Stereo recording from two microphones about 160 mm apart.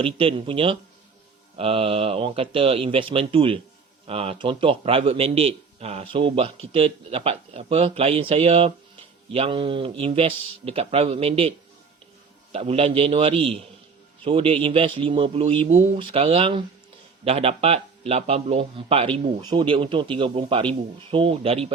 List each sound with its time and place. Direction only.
0.0 s a man's voice: 35° right (ahead or behind)